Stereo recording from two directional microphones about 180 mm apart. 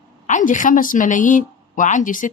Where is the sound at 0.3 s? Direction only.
45° left (ahead or behind).